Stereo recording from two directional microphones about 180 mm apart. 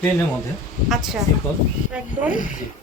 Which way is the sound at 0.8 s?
Centre (ahead or behind).